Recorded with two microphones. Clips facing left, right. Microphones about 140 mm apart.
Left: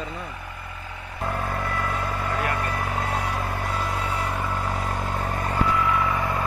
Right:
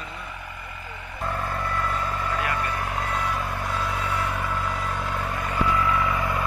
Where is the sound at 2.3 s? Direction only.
45° left (ahead or behind).